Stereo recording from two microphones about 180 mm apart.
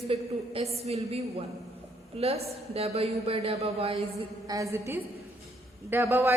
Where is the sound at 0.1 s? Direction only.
30° right (ahead or behind).